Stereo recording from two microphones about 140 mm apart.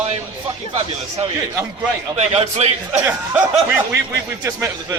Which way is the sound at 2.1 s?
45° right (ahead or behind).